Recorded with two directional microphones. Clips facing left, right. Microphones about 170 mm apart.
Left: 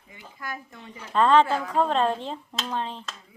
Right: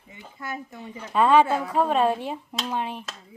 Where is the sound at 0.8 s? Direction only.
10° right (ahead or behind).